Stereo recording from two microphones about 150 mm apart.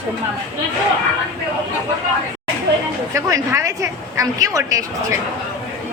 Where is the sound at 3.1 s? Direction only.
20° right (ahead or behind).